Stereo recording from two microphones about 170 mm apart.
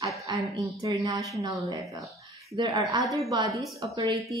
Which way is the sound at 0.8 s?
20° right (ahead or behind).